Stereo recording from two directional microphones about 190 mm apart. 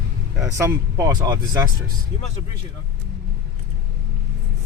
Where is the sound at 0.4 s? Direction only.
15° right (ahead or behind).